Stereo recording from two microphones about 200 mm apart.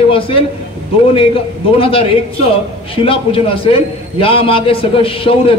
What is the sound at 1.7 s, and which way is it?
A man's voice, 25° left (ahead or behind).